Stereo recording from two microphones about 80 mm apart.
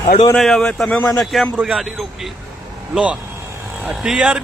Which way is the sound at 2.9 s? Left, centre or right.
Centre.